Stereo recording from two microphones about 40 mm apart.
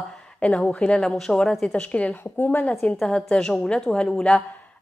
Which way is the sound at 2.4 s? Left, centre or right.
Left.